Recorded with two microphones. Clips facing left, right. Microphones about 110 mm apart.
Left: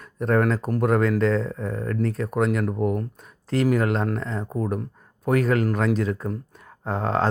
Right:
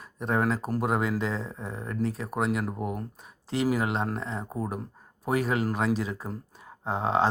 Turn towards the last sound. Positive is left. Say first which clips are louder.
# left 2 dB
turn(degrees=-20)  # may be behind; listen again after turning